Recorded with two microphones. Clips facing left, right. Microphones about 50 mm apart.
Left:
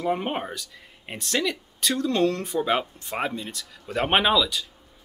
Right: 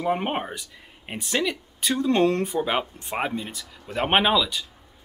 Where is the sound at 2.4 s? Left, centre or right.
Centre.